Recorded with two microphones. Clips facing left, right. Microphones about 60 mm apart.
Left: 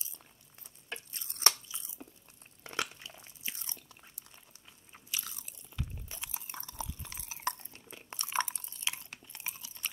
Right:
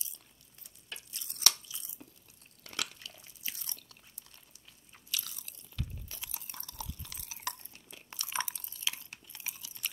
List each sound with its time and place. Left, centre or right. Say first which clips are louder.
0.8 s a sound: left 4 dB; left
2.6 s biting: left 4 dB; left
4.9 s crunch: even; left